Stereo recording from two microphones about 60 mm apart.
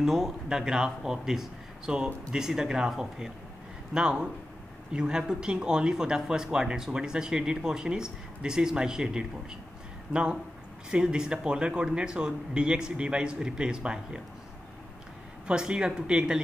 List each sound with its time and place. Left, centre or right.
0.0 s speech: centre
15.4 s speech: centre